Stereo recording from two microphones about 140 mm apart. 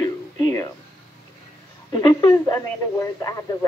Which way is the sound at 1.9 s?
30° left (ahead or behind).